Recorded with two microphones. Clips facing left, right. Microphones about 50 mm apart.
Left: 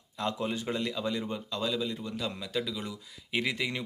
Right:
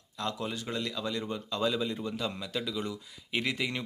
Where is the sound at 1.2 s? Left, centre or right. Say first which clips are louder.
Right 2 dB; centre.